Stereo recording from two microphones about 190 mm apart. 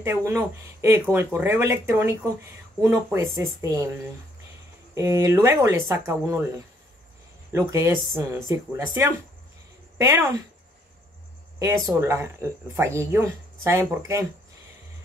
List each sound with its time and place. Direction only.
0.0 s speech: 15° right (ahead or behind)
4.9 s speech: 15° right (ahead or behind)
7.5 s speech: 20° right (ahead or behind)
12.0 s speech: 15° right (ahead or behind)